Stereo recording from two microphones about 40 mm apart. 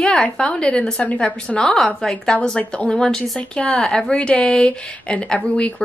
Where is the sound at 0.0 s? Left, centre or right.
Left.